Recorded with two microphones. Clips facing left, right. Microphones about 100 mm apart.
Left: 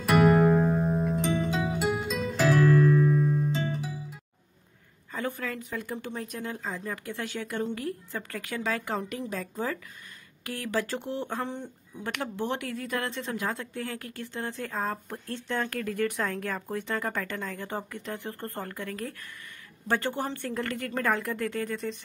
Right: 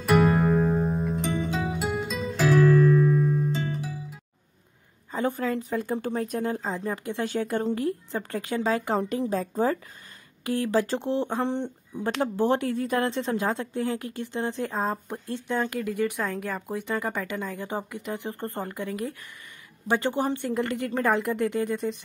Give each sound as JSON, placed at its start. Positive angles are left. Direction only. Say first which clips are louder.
{"t": 0.0, "sound": "music", "louder": "even", "side_deg": 0}
{"t": 5.1, "sound": "speech", "louder": "right 6 dB", "side_deg": -25}
{"t": 7.2, "sound": "a woman's voice", "louder": "right 6 dB", "side_deg": -35}
{"t": 11.6, "sound": "a woman's voice", "louder": "right 7 dB", "side_deg": -30}